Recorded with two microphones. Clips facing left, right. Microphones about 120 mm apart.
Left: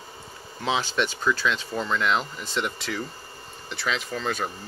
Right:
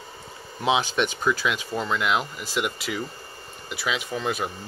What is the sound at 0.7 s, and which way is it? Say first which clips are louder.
Speech: right 3 dB; 15° right (ahead or behind).